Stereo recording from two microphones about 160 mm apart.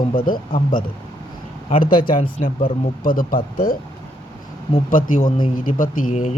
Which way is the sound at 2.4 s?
60° left (ahead or behind).